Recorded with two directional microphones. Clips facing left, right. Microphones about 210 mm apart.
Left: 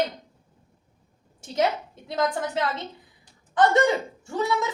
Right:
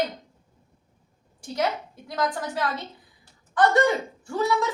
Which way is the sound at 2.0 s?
25° left (ahead or behind).